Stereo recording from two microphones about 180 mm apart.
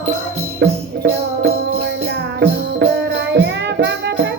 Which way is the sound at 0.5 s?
65° right (ahead or behind).